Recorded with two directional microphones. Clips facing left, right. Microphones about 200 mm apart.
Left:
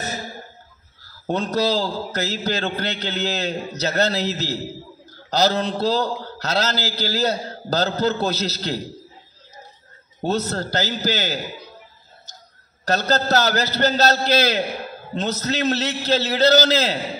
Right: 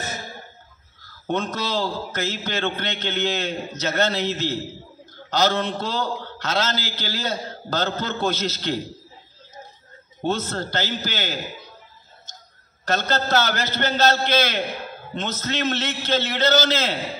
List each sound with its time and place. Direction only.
1.2 s a man's voice: 35° left (ahead or behind)
10.2 s a man's voice: 40° left (ahead or behind)
12.8 s a man's voice: 35° left (ahead or behind)